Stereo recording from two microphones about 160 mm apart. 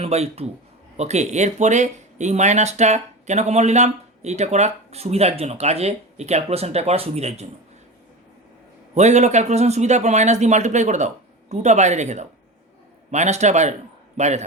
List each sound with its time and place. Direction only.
0.0 s speech: 40° right (ahead or behind)
9.0 s speech: 45° right (ahead or behind)